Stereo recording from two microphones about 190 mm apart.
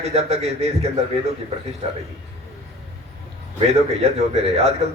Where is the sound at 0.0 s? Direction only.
35° right (ahead or behind).